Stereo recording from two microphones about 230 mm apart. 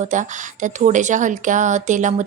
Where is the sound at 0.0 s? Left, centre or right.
Right.